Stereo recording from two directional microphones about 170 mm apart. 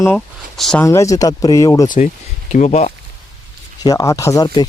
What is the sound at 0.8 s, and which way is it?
Speech, 15° left (ahead or behind).